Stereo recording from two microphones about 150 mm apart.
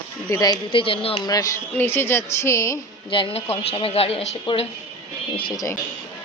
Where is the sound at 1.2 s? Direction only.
25° left (ahead or behind).